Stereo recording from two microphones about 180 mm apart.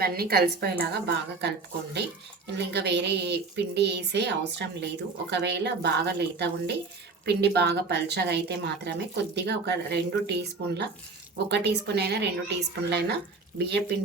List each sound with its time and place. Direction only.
0.0 s a woman's voice: 60° right (ahead or behind)